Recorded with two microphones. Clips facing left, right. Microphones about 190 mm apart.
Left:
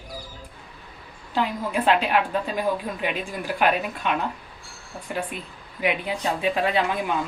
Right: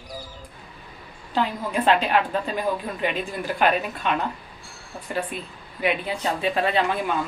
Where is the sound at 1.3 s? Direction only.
10° left (ahead or behind).